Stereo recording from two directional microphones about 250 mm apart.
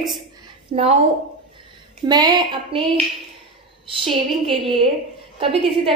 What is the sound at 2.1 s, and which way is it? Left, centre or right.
Speech, centre.